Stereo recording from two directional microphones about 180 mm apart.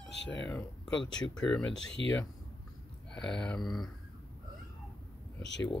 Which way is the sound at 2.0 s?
90° left.